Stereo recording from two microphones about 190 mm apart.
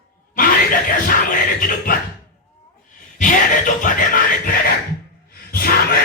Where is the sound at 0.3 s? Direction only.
45° left (ahead or behind).